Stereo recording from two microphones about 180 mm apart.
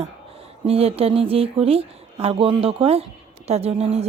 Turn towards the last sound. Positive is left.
turn(degrees=-35)  # may be behind; listen again after turning